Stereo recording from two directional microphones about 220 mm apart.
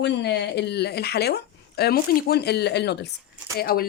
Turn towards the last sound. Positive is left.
turn(degrees=45)  # may be behind; listen again after turning